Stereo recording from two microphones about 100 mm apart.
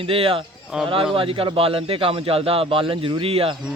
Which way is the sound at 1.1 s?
65° right (ahead or behind).